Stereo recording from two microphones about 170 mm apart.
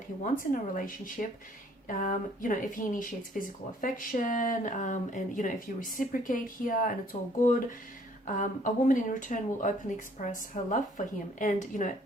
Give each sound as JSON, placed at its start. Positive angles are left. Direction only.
{"t": 0.3, "sound": "speech", "side_deg": 55}